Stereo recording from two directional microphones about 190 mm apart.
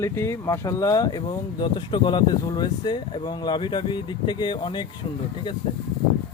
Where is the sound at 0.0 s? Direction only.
15° left (ahead or behind).